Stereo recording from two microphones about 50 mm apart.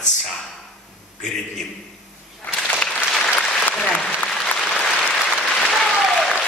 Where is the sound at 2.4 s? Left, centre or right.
Left.